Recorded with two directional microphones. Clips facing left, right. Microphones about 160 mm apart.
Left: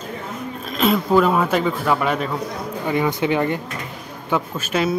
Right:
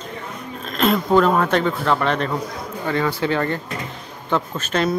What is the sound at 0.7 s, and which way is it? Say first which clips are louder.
Speech: even; centre (ahead or behind).